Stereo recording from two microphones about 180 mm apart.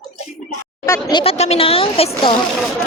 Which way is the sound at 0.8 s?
15° left (ahead or behind).